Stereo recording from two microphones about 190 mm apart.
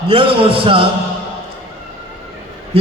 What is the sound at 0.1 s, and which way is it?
Speech, 30° right (ahead or behind).